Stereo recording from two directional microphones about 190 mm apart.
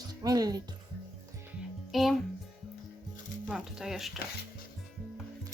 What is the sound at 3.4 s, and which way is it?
Speech, centre (ahead or behind).